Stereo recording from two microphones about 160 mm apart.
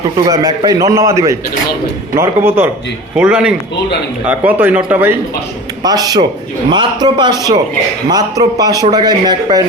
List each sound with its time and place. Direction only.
0.3 s a man's voice: 20° right (ahead or behind)
5.8 s a man's voice: 25° right (ahead or behind)